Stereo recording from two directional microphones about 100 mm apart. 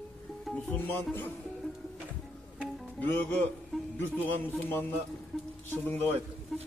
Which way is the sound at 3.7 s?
5° left (ahead or behind).